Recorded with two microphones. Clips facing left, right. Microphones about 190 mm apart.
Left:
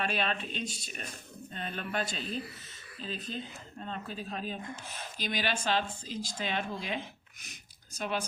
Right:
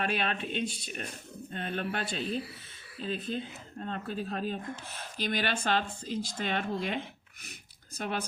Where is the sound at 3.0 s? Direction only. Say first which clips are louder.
Right 5 dB; 55° right (ahead or behind).